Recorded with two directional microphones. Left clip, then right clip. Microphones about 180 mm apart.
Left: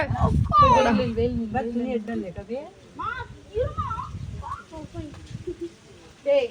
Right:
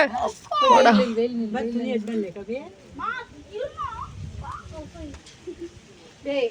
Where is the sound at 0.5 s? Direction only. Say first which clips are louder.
Right 2 dB; 60° right (ahead or behind).